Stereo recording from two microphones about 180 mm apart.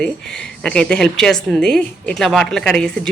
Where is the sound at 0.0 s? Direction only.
5° left (ahead or behind).